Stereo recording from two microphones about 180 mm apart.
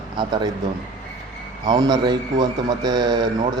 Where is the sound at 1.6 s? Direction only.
25° right (ahead or behind).